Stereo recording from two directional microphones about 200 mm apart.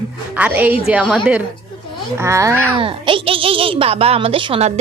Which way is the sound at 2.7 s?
25° right (ahead or behind).